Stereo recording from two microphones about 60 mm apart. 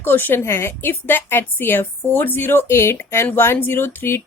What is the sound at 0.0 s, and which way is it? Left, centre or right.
A woman's voice, left.